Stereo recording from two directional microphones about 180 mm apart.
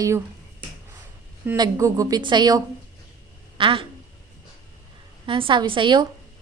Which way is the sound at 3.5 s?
30° right (ahead or behind).